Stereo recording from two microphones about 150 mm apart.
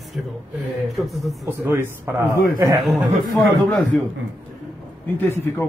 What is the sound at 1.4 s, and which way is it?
Speech, 15° right (ahead or behind).